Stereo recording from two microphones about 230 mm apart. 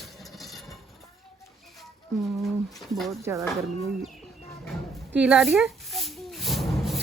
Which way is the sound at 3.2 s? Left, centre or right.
Centre.